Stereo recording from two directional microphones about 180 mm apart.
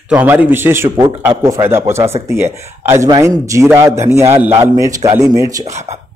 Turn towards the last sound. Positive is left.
turn(degrees=-40)  # may be behind; listen again after turning